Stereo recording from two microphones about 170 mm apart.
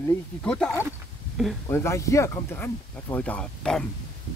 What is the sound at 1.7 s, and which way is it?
Speech, 15° left (ahead or behind).